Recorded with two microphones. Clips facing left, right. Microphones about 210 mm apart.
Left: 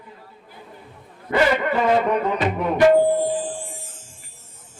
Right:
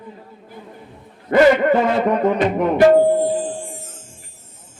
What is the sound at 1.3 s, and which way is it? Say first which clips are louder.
Music: right 7 dB; 40° right (ahead or behind).